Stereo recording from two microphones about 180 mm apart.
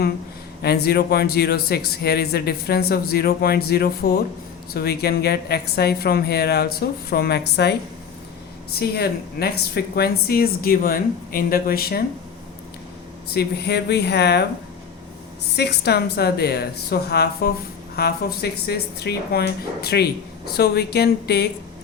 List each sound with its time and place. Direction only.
0.6 s speech: 60° left (ahead or behind)
8.8 s speech: 60° left (ahead or behind)
13.3 s speech: 65° left (ahead or behind)
15.5 s speech: 65° left (ahead or behind)